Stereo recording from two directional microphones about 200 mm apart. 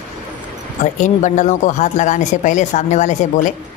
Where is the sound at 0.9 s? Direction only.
35° left (ahead or behind).